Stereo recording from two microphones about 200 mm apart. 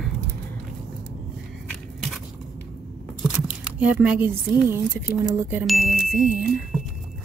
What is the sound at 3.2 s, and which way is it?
Speech, 5° right (ahead or behind).